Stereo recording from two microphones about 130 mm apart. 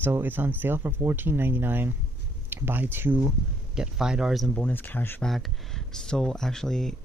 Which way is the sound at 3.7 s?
5° right (ahead or behind).